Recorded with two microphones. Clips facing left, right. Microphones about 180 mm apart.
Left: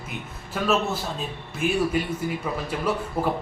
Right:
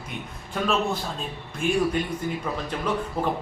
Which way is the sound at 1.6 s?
5° left (ahead or behind).